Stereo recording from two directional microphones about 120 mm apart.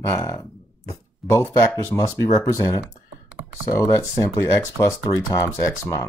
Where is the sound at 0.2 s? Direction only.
30° left (ahead or behind).